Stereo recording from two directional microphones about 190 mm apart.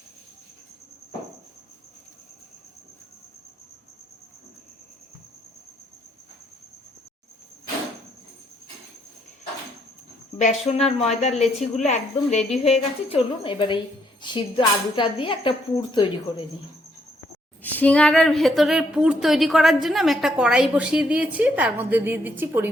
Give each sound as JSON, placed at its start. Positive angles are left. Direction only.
{"t": 10.3, "sound": "a woman's voice", "side_deg": 35}
{"t": 17.6, "sound": "a woman's voice", "side_deg": 10}